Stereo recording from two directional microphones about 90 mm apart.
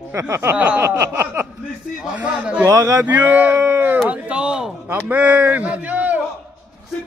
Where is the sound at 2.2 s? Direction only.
15° right (ahead or behind).